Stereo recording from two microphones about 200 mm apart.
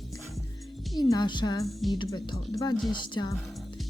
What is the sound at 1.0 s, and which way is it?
Speech, 20° left (ahead or behind).